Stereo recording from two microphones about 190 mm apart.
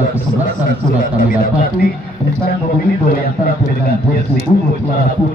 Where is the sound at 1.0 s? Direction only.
45° left (ahead or behind).